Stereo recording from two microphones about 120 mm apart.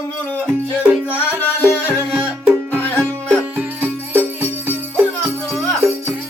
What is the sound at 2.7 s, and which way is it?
Music, 15° left (ahead or behind).